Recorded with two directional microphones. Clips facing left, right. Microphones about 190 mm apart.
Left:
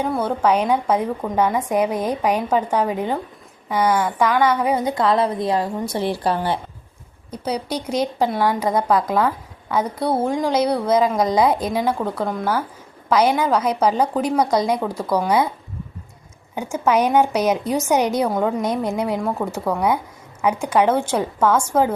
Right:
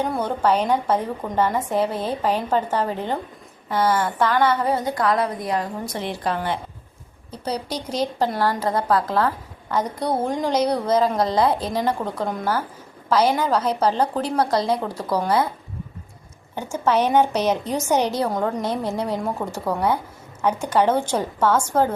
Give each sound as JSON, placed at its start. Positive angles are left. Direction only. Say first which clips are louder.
{"t": 0.0, "sound": "a woman's voice", "louder": "left 2 dB", "side_deg": 5}
{"t": 7.3, "sound": "a woman's voice", "louder": "left 3 dB", "side_deg": 10}
{"t": 16.6, "sound": "speech", "louder": "left 2 dB", "side_deg": 10}